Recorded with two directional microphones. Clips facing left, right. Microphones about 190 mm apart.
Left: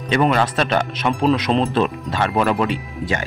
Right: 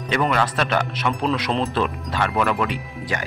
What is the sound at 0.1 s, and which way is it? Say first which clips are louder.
Speech: left 4 dB; 25° left (ahead or behind).